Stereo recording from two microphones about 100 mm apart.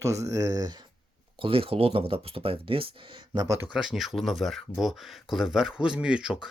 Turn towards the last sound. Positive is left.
turn(degrees=-10)  # may be behind; listen again after turning